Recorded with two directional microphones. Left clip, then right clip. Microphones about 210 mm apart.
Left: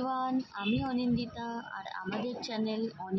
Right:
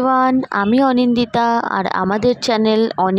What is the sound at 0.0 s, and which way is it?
Speech, 50° right (ahead or behind).